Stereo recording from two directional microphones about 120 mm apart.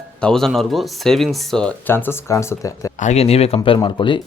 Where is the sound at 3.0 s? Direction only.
60° left (ahead or behind); by 4.2 s 40° left (ahead or behind).